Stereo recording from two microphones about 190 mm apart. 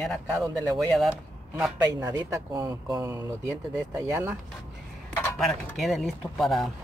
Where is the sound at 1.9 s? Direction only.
20° right (ahead or behind).